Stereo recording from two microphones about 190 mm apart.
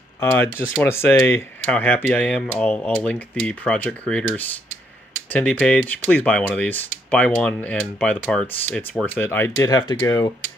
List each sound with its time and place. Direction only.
0.2 s speech: 10° left (ahead or behind)